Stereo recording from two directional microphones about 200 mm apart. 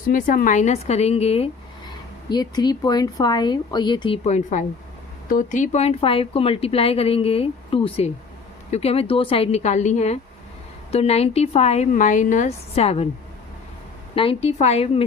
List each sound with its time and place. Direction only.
0.1 s a woman's voice: 45° left (ahead or behind)
2.3 s a woman's voice: 20° left (ahead or behind)
4.3 s a woman's voice: 35° left (ahead or behind)
14.2 s a woman's voice: 30° left (ahead or behind)